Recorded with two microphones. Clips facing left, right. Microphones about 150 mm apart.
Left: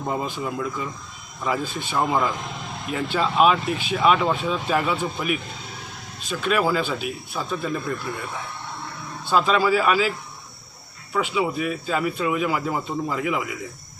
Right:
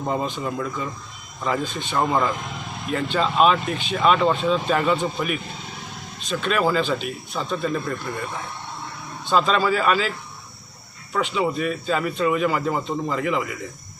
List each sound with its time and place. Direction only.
0.1 s speech: 5° left (ahead or behind)
9.2 s a man's voice: 5° left (ahead or behind)
11.1 s speech: 5° left (ahead or behind)